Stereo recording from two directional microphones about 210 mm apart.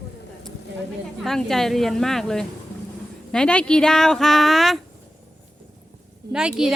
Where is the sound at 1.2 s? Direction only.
Centre (ahead or behind).